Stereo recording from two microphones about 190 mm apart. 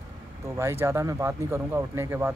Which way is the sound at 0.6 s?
15° right (ahead or behind).